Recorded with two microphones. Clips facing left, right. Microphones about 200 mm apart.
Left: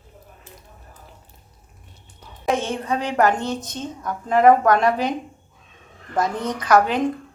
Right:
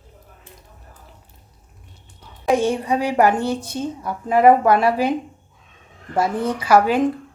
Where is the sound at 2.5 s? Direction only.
15° right (ahead or behind).